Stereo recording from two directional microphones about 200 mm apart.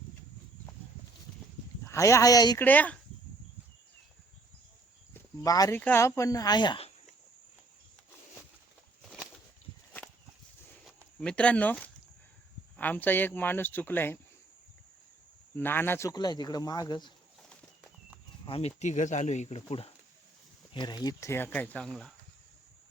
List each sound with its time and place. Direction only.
1.8 s speech: 15° left (ahead or behind)
2.6 s speech: 10° left (ahead or behind)
5.4 s speech: 15° left (ahead or behind)
11.2 s speech: 5° left (ahead or behind)
15.5 s speech: 10° left (ahead or behind)
18.4 s speech: 25° left (ahead or behind)
18.8 s speech: 35° left (ahead or behind); by 22.1 s centre (ahead or behind)